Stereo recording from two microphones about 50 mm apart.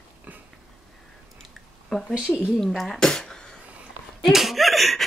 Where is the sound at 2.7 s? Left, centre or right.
Centre.